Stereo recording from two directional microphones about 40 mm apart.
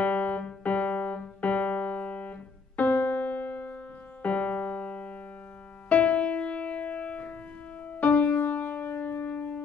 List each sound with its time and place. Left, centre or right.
0.0 s piano: left
5.9 s music: left
7.9 s music: left